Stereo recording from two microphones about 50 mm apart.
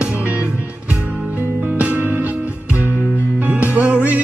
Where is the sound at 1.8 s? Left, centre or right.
Right.